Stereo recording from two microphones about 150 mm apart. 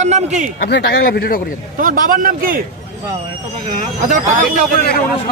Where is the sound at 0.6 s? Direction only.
90° left.